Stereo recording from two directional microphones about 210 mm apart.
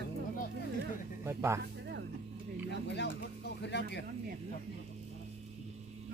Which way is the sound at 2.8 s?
55° left (ahead or behind).